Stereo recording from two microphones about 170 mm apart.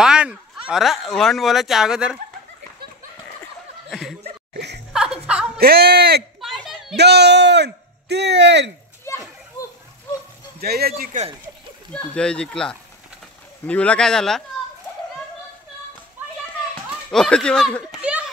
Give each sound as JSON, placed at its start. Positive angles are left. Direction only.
{"t": 0.0, "sound": "speech", "side_deg": -5}
{"t": 3.9, "sound": "speech", "side_deg": 0}
{"t": 4.6, "sound": "speech", "side_deg": -80}
{"t": 4.9, "sound": "music", "side_deg": -5}
{"t": 5.6, "sound": "speech", "side_deg": -65}
{"t": 6.4, "sound": "a sound", "side_deg": 0}
{"t": 7.0, "sound": "speech", "side_deg": -80}
{"t": 9.1, "sound": "children playing", "side_deg": 15}
{"t": 10.6, "sound": "speech", "side_deg": -65}
{"t": 11.9, "sound": "speech", "side_deg": 5}
{"t": 17.1, "sound": "speech", "side_deg": 5}
{"t": 18.0, "sound": "a child's voice", "side_deg": -10}